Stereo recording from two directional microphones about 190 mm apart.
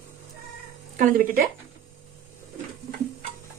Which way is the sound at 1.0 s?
45° right (ahead or behind).